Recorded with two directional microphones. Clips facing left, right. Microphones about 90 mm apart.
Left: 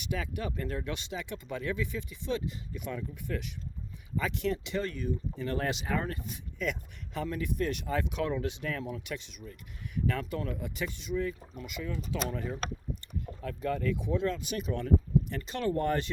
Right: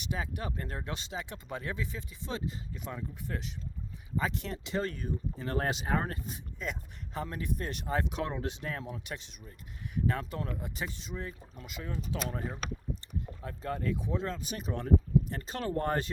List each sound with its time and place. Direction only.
0.0 s speech: 35° right (ahead or behind)